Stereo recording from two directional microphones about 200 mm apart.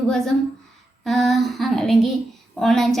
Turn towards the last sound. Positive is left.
turn(degrees=0)  # may be behind; listen again after turning